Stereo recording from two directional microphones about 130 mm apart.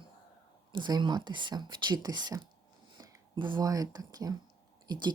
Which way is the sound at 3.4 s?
35° right (ahead or behind).